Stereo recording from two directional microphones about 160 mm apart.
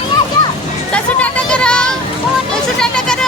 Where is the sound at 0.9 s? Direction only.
5° left (ahead or behind).